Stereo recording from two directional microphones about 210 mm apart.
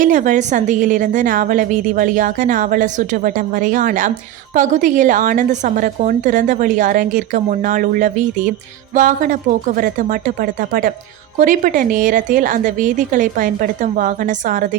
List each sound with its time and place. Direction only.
0.0 s a woman's voice: 35° right (ahead or behind)